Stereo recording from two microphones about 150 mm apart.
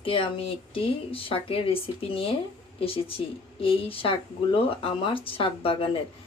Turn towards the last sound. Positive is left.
turn(degrees=35)  # may be behind; listen again after turning